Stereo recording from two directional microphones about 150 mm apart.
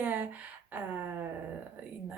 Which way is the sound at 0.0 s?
10° right (ahead or behind).